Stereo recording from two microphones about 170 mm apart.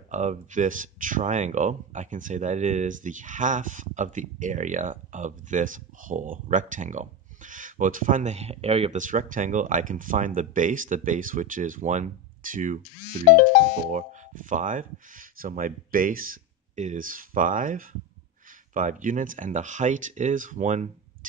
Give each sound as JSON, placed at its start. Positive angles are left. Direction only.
{"t": 0.1, "sound": "speech", "side_deg": -45}
{"t": 9.0, "sound": "speech", "side_deg": -50}